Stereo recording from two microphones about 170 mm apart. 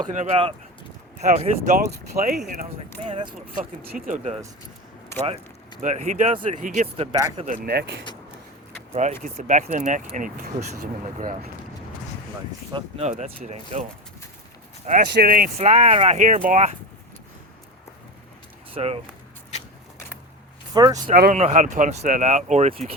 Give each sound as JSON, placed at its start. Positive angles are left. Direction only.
{"t": 0.1, "sound": "speech", "side_deg": -45}
{"t": 1.9, "sound": "speech", "side_deg": -70}
{"t": 3.0, "sound": "speech", "side_deg": -35}
{"t": 3.9, "sound": "speech", "side_deg": -50}
{"t": 5.8, "sound": "speech", "side_deg": -45}
{"t": 6.3, "sound": "speech", "side_deg": -30}
{"t": 7.3, "sound": "speech", "side_deg": -50}
{"t": 8.9, "sound": "speech", "side_deg": -40}
{"t": 12.7, "sound": "speech", "side_deg": -40}
{"t": 15.1, "sound": "speech", "side_deg": -60}
{"t": 15.5, "sound": "speech", "side_deg": -40}
{"t": 18.7, "sound": "speech", "side_deg": -35}
{"t": 20.7, "sound": "speech", "side_deg": -25}
{"t": 21.1, "sound": "speech", "side_deg": -50}